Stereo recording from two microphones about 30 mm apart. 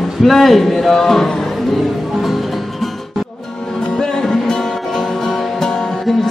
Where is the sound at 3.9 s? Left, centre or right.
Centre.